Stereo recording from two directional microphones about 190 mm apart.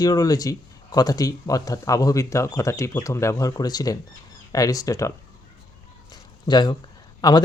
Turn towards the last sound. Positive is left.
turn(degrees=20)  # may be behind; listen again after turning